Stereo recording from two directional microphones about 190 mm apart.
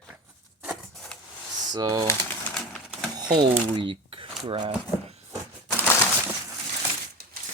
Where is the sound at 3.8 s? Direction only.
25° right (ahead or behind).